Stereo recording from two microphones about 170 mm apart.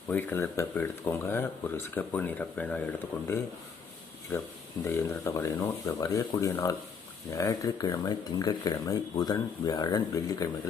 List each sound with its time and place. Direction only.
0.1 s speech: 10° left (ahead or behind)
4.9 s speech: 15° left (ahead or behind)